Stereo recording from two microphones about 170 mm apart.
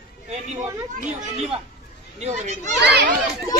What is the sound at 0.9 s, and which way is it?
Speech, 40° right (ahead or behind).